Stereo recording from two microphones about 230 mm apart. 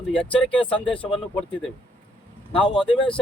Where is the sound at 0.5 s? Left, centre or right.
Left.